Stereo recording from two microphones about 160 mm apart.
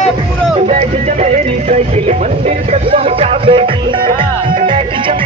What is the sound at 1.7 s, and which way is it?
Music, 45° right (ahead or behind).